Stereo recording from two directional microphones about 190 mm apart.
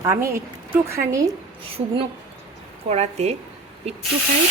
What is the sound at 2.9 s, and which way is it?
Speech, 35° right (ahead or behind).